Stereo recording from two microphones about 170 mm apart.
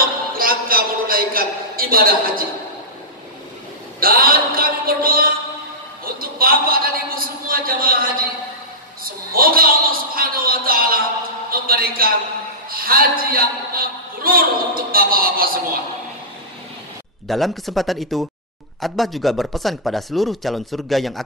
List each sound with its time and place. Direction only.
0.4 s a sound: 60° right (ahead or behind)
4.0 s a man's voice: 60° right (ahead or behind)
9.3 s a man's voice: 60° right (ahead or behind)
17.3 s speech: centre (ahead or behind)